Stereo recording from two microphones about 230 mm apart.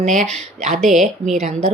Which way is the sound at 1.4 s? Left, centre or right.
Right.